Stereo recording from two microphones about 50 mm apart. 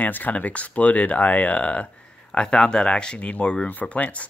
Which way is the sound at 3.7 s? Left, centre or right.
Left.